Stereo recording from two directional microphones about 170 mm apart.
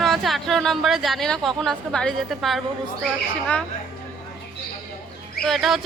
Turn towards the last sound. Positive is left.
turn(degrees=0)  # may be behind; listen again after turning